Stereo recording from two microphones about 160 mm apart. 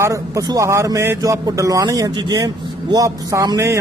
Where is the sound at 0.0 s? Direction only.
20° right (ahead or behind).